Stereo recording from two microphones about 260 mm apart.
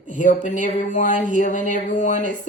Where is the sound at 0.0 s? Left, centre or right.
Left.